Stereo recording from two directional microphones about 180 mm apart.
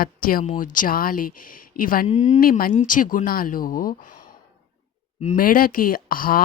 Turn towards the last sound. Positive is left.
turn(degrees=55)  # may be behind; listen again after turning